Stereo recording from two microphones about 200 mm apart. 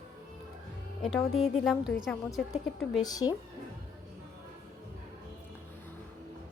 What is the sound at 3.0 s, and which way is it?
Speech, 20° left (ahead or behind).